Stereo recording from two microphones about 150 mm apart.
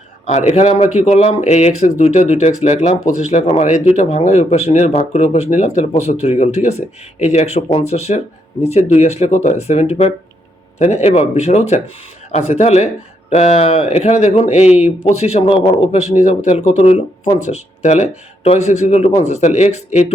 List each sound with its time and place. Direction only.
0.3 s speech: 50° left (ahead or behind); by 15.9 s 35° left (ahead or behind)
15.9 s speech: 50° left (ahead or behind)